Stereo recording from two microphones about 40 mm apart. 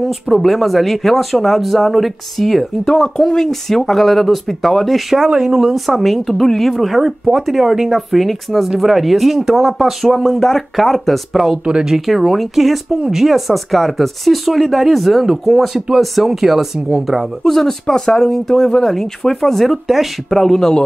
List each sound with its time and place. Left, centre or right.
0.0 s speech: centre
5.3 s speech: centre
5.9 s speech: centre
10.3 s speech: centre
11.3 s speech: centre
17.4 s speech: centre